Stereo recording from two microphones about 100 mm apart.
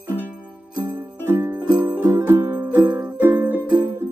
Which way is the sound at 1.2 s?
25° right (ahead or behind).